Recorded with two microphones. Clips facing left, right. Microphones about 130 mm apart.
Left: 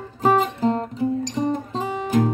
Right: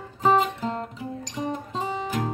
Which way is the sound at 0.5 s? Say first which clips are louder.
Left 8 dB; 35° left (ahead or behind).